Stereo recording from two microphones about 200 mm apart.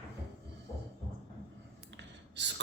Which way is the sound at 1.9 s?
60° right (ahead or behind).